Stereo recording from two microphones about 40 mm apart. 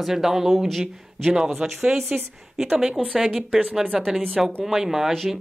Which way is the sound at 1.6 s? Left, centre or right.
Right.